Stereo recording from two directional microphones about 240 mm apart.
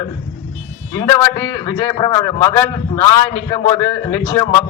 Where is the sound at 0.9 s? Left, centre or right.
Centre.